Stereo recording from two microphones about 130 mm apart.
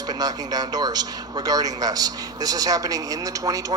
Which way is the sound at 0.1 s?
30° right (ahead or behind).